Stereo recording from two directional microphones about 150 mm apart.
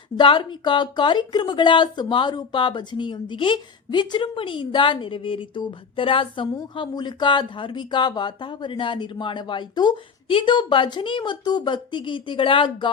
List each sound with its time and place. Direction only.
0.2 s speech: 35° left (ahead or behind)